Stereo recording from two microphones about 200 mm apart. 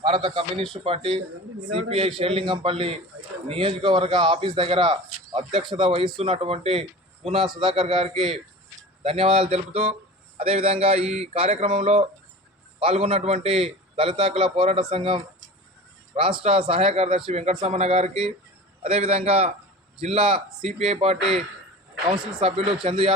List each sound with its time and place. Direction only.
0.0 s a man's voice: 25° right (ahead or behind)
16.4 s a man's voice: 30° right (ahead or behind)